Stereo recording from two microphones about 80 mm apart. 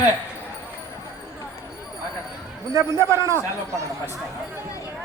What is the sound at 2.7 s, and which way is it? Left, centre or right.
A man's voice, right.